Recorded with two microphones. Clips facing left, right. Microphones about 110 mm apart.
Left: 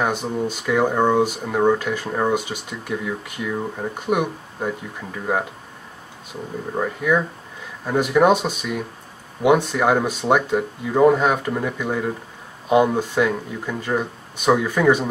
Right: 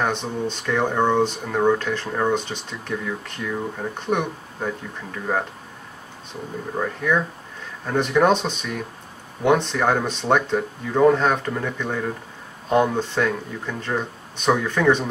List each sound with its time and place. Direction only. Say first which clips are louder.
0.0 s speech: left 2 dB; 10° left (ahead or behind)
6.7 s speech: left 2 dB; 5° left (ahead or behind)